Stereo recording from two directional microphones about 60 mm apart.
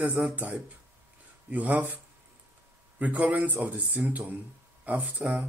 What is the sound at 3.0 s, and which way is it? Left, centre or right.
Speech, right.